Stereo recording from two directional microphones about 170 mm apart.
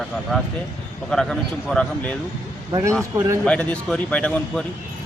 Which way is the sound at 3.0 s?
15° right (ahead or behind).